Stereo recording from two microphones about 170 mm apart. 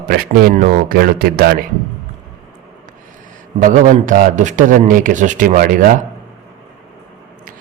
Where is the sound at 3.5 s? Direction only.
50° right (ahead or behind).